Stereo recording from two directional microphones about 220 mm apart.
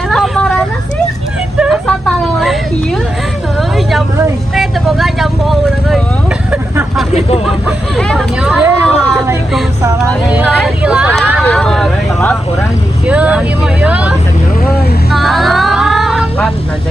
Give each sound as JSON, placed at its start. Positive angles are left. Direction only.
{"t": 0.1, "sound": "vehicle", "side_deg": 5}
{"t": 1.5, "sound": "a sound", "side_deg": -5}
{"t": 3.6, "sound": "vehicle", "side_deg": 0}
{"t": 7.1, "sound": "vehicle", "side_deg": 25}
{"t": 7.9, "sound": "vehicle", "side_deg": 5}